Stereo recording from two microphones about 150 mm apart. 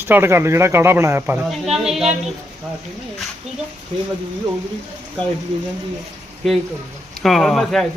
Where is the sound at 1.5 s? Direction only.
Centre (ahead or behind).